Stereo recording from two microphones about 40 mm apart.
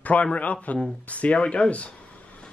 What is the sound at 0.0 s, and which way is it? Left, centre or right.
Speech, left.